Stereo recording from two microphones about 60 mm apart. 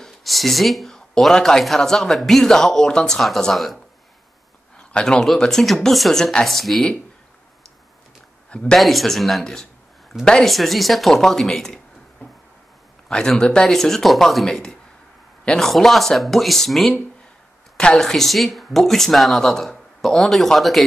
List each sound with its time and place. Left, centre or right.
0.0 s speech: centre
5.0 s speech: centre
8.5 s speech: centre
8.7 s speech: centre
10.5 s speech: centre
13.1 s speech: centre
15.7 s speech: centre